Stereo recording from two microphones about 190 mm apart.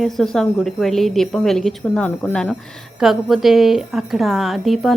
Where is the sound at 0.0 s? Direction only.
Centre (ahead or behind).